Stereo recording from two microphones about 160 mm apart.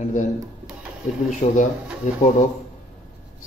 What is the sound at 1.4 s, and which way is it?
Speech, 35° left (ahead or behind).